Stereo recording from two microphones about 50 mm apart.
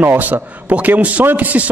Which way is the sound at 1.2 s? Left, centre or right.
Right.